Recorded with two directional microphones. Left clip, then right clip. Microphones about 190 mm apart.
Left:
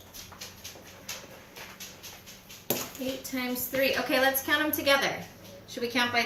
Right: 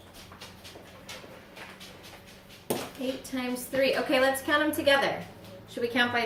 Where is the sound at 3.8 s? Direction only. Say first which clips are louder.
Right 1 dB; 5° right (ahead or behind).